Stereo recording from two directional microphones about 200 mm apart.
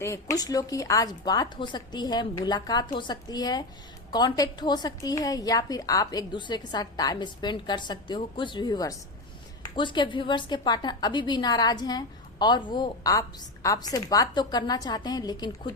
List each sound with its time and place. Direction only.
0.0 s a woman's voice: 15° left (ahead or behind)